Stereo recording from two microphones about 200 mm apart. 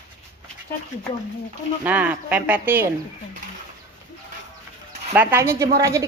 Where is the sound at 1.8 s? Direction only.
10° right (ahead or behind).